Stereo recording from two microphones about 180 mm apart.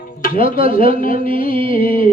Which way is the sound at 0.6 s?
50° left (ahead or behind).